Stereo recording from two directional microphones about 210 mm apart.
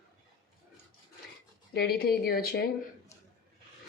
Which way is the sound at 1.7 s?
50° left (ahead or behind).